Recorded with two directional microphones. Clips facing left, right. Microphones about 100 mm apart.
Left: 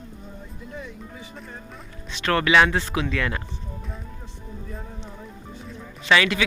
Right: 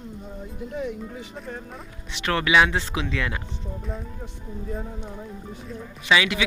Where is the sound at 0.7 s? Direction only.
75° right (ahead or behind).